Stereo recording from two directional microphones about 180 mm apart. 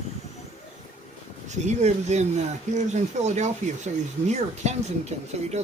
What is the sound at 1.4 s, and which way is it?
Speech, 40° right (ahead or behind).